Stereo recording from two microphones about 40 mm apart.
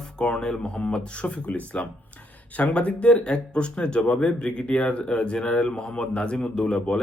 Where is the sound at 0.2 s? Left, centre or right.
Centre.